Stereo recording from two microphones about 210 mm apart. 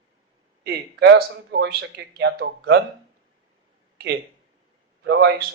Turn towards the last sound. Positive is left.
turn(degrees=-55)  # may be behind; listen again after turning